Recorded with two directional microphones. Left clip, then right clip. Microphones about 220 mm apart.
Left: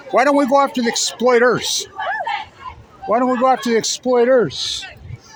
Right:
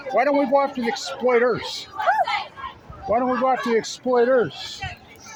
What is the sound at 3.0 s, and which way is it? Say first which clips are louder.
Speech: left 5 dB; 45° left (ahead or behind).